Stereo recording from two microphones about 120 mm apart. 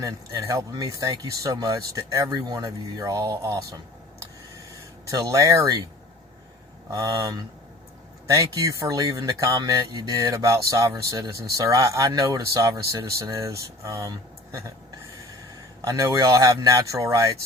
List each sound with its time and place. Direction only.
0.0 s speech: 25° right (ahead or behind)
5.1 s speech: 30° right (ahead or behind)
6.9 s speech: 30° right (ahead or behind)
15.8 s speech: 25° right (ahead or behind)